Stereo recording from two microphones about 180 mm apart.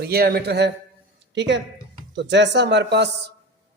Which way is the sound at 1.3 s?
80° right.